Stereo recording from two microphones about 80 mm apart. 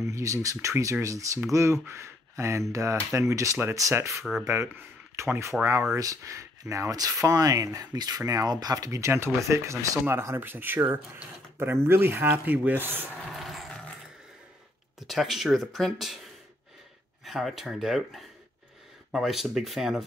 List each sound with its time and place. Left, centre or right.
0.0 s speech: right
4.1 s speech: centre
4.5 s speech: right
8.2 s speech: right
13.3 s a sound: centre
15.0 s speech: centre
17.2 s speech: centre